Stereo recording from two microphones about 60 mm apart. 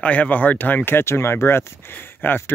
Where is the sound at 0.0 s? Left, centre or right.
Left.